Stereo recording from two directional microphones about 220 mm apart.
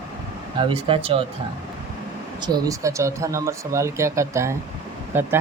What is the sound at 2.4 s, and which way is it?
Speech, 20° right (ahead or behind).